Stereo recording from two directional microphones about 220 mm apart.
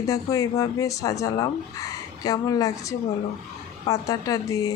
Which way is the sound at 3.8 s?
15° left (ahead or behind).